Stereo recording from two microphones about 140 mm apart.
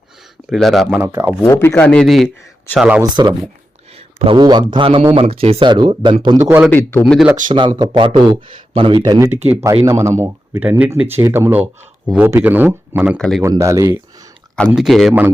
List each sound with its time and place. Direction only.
0.5 s speech: centre (ahead or behind)
1.0 s speech: 20° right (ahead or behind)
1.5 s speech: 15° left (ahead or behind)
2.0 s speech: centre (ahead or behind)
3.0 s a man's voice: 35° right (ahead or behind)
6.2 s speech: 20° right (ahead or behind)
6.7 s speech: 15° left (ahead or behind)
7.0 s speech: 5° right (ahead or behind)
7.8 s speech: 35° right (ahead or behind)
9.0 s speech: 25° right (ahead or behind)
13.1 s speech: 5° left (ahead or behind)
13.4 s speech: 20° right (ahead or behind)
14.7 s speech: centre (ahead or behind)